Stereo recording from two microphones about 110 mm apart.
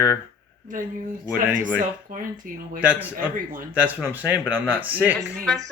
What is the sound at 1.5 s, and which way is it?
Speech, 15° right (ahead or behind).